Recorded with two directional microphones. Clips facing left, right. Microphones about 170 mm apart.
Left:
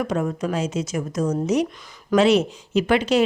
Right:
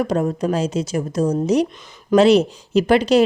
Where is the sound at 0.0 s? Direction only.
35° right (ahead or behind).